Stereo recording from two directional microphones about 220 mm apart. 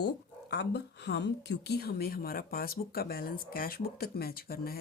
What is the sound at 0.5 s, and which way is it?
A woman's voice, 50° left (ahead or behind).